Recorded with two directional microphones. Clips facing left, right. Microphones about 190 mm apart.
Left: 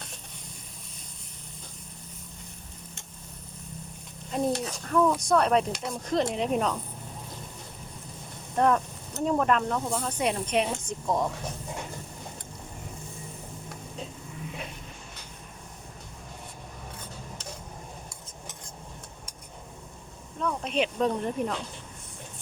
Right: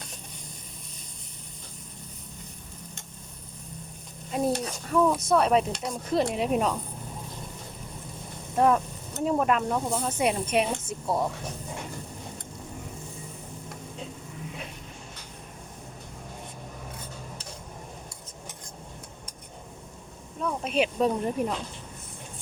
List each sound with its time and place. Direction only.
4.3 s speech: 5° right (ahead or behind)
8.5 s speech: 5° right (ahead or behind)
20.4 s speech: 10° right (ahead or behind)